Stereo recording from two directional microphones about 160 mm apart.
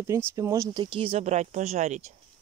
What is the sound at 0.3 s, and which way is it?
Speech, 20° right (ahead or behind).